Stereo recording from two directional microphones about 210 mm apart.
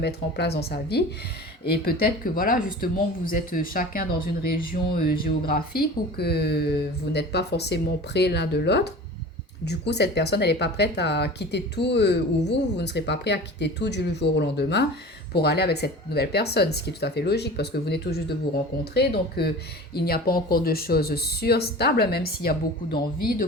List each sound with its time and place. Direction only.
0.0 s speech: 50° left (ahead or behind)